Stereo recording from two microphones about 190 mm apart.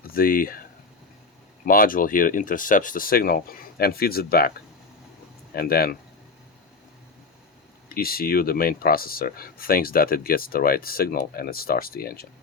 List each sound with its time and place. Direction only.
0.0 s speech: 50° left (ahead or behind)
1.6 s speech: 45° left (ahead or behind)
5.5 s speech: 50° left (ahead or behind)
7.9 s speech: 50° left (ahead or behind)